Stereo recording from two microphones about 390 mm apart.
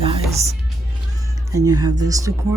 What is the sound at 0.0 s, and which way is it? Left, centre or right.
Music, centre.